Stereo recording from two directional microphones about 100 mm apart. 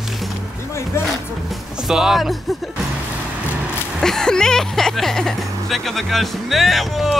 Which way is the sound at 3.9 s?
5° left (ahead or behind).